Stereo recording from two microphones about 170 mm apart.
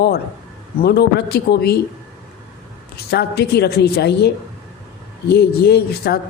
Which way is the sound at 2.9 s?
70° left (ahead or behind).